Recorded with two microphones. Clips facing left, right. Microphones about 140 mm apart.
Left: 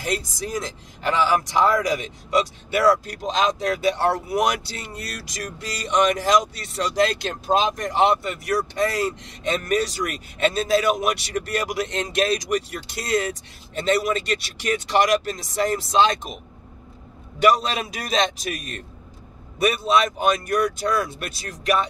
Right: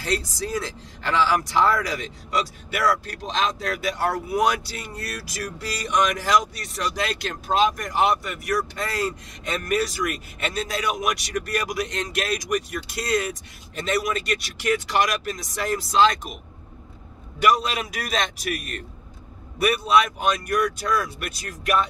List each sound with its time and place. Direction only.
0.0 s speech: 20° left (ahead or behind)
17.4 s speech: 30° left (ahead or behind)
19.6 s speech: 25° left (ahead or behind)